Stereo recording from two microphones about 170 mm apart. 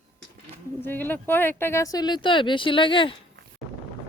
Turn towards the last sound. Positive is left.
turn(degrees=30)  # may be behind; listen again after turning